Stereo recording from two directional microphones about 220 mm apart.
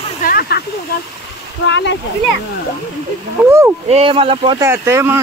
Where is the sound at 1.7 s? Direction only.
55° left (ahead or behind).